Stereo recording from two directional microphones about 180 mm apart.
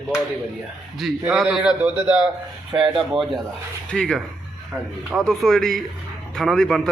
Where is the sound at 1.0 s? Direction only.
5° right (ahead or behind).